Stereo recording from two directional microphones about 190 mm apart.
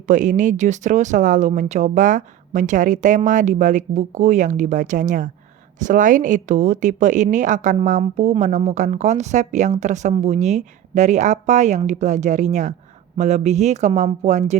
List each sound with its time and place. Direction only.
0.1 s a woman's voice: 40° right (ahead or behind)